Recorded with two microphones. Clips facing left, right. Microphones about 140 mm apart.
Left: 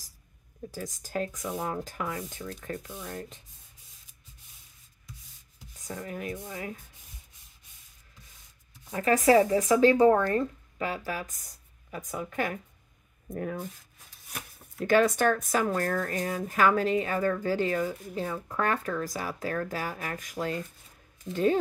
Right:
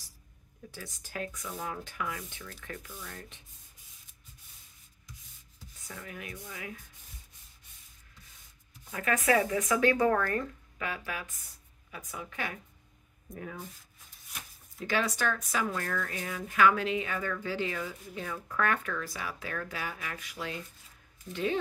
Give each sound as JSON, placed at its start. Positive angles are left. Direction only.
{"t": 0.7, "sound": "speech", "side_deg": 40}
{"t": 5.9, "sound": "speech", "side_deg": 35}
{"t": 6.3, "sound": "rub", "side_deg": 30}
{"t": 8.9, "sound": "speech", "side_deg": 35}